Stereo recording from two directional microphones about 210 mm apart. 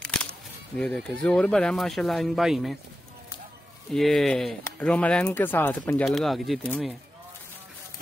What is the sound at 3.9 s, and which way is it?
Speech, centre (ahead or behind).